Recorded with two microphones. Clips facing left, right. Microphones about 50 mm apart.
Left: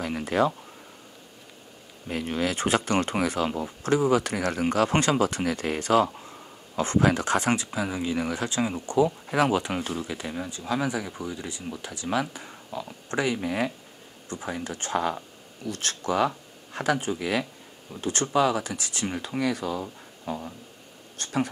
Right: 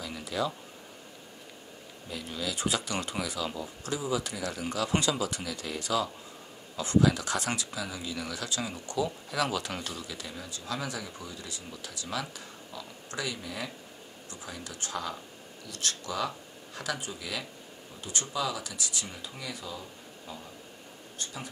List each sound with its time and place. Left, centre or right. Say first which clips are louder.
0.0 s speech: left 8 dB; left
2.0 s speech: left 8 dB; left